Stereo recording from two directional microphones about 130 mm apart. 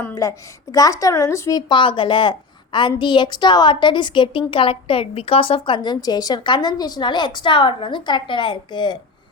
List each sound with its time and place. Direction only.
0.1 s a woman's voice: 25° left (ahead or behind)